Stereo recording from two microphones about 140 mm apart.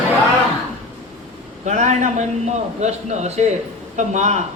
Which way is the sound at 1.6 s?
60° right (ahead or behind).